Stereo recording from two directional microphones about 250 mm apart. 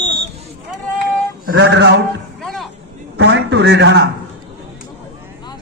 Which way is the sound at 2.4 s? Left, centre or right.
Centre.